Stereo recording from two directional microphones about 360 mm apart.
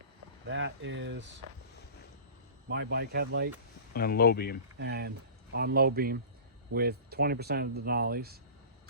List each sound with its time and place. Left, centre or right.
0.4 s speech: right
2.6 s speech: right
3.9 s speech: left
4.8 s speech: right